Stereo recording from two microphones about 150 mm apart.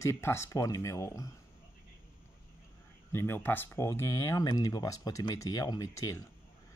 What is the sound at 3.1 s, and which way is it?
Speech, 15° left (ahead or behind).